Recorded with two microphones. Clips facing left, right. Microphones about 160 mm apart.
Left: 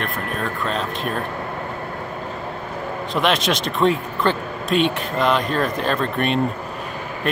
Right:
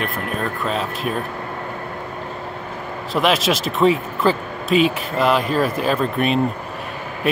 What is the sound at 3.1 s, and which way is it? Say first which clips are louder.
Speech: right 2 dB; centre (ahead or behind).